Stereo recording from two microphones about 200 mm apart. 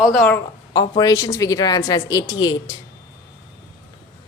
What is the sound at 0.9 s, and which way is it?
A woman's voice, 20° left (ahead or behind).